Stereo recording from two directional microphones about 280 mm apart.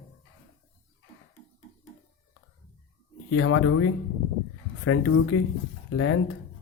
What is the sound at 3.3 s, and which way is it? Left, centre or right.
Speech, left.